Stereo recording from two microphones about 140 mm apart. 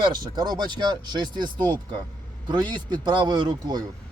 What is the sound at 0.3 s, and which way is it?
Speech, 30° right (ahead or behind).